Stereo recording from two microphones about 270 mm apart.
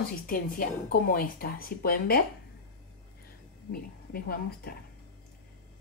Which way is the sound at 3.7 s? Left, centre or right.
Left.